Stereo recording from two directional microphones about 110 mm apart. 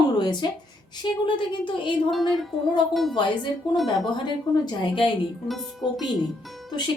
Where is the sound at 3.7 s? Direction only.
Centre (ahead or behind).